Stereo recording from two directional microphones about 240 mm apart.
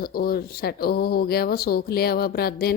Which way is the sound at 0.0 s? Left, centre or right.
Left.